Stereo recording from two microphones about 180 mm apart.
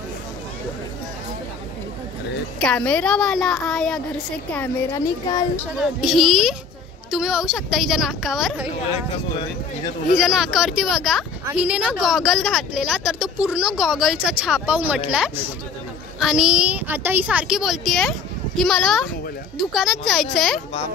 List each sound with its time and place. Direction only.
2.6 s speech: 5° left (ahead or behind)
4.6 s speech: 15° left (ahead or behind)
5.8 s speech: centre (ahead or behind)
10.1 s speech: centre (ahead or behind)